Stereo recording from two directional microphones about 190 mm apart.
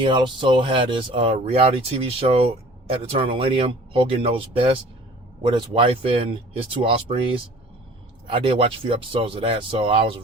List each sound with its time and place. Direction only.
0.0 s speech: 25° right (ahead or behind)